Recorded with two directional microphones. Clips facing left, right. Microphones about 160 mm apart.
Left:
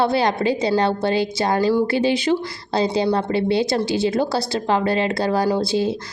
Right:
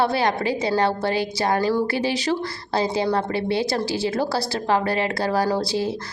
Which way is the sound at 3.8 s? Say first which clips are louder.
Left 4 dB; 30° right (ahead or behind).